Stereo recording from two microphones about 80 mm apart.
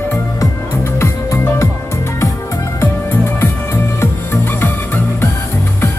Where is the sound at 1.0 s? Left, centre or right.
Left.